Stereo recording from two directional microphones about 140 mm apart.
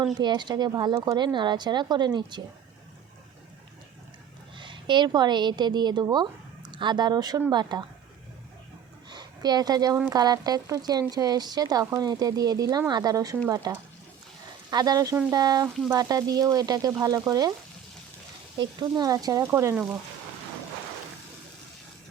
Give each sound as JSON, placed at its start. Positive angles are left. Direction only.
{"t": 0.0, "sound": "speech", "side_deg": -30}
{"t": 4.5, "sound": "a woman's voice", "side_deg": -35}
{"t": 9.0, "sound": "a sound", "side_deg": -30}
{"t": 10.1, "sound": "speech", "side_deg": -25}
{"t": 18.5, "sound": "speech", "side_deg": -30}
{"t": 19.7, "sound": "speech", "side_deg": -10}